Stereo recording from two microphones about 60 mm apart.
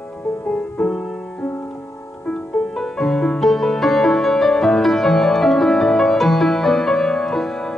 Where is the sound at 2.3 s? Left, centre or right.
Centre.